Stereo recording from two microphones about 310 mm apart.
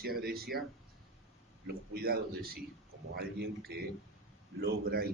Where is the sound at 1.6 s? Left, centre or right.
Right.